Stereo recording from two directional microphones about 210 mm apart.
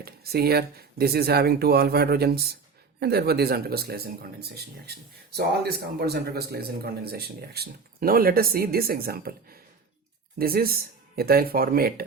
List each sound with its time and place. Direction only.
0.0 s speech: 50° right (ahead or behind)